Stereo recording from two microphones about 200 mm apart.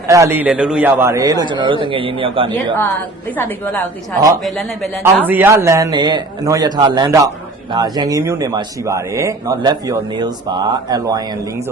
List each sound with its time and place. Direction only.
0.1 s a man's voice: 15° right (ahead or behind)
5.0 s a man's voice: 10° right (ahead or behind)